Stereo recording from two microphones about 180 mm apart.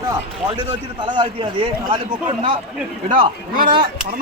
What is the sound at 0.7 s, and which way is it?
A man's voice, 30° right (ahead or behind).